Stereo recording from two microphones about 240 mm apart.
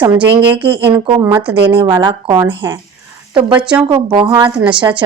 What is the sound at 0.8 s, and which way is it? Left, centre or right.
Speech, centre.